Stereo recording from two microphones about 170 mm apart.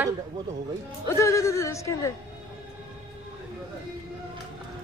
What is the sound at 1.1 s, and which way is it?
Speech, 15° left (ahead or behind).